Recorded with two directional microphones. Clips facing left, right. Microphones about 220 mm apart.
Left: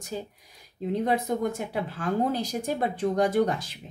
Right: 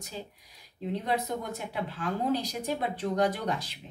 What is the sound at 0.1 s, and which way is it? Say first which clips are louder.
A woman's voice: left 7 dB; 50° left (ahead or behind).